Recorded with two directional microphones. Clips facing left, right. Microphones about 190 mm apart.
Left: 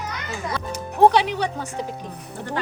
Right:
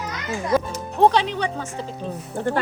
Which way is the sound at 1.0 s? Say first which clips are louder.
Left 1 dB; 10° left (ahead or behind).